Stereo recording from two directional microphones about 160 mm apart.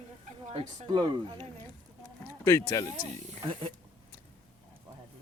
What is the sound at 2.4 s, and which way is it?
Speech, 20° left (ahead or behind).